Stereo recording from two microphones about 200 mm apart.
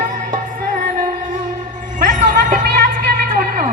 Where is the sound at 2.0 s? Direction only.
40° right (ahead or behind).